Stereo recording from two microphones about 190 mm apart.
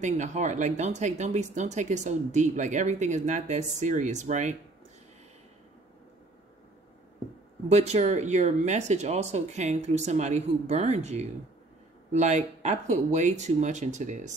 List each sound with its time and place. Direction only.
0.0 s speech: 40° right (ahead or behind)
7.6 s speech: 35° right (ahead or behind)